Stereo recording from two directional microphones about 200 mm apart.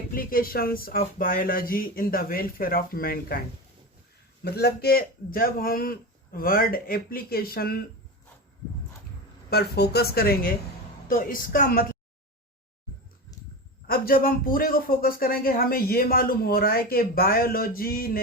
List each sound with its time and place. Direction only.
0.1 s speech: 45° left (ahead or behind)
4.4 s speech: 55° left (ahead or behind)
9.5 s speech: 55° left (ahead or behind)
13.8 s speech: 45° left (ahead or behind)